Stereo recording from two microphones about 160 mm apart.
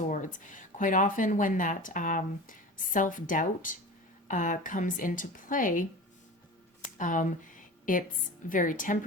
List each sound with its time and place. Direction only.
0.1 s speech: 55° left (ahead or behind)
7.0 s speech: 55° left (ahead or behind)